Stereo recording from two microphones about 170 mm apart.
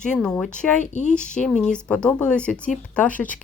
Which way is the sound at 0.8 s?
45° left (ahead or behind).